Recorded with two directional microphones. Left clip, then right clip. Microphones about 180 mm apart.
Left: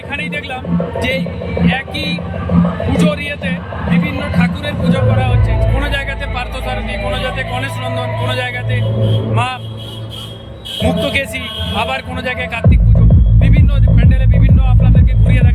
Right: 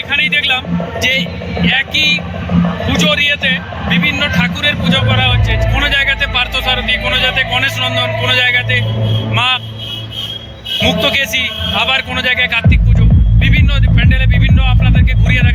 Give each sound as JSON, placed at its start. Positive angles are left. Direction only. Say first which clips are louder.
{"t": 0.1, "sound": "speech", "louder": "right 10 dB", "side_deg": 0}
{"t": 10.8, "sound": "speech", "louder": "right 3 dB", "side_deg": 0}
{"t": 13.4, "sound": "music", "louder": "right 5 dB", "side_deg": 0}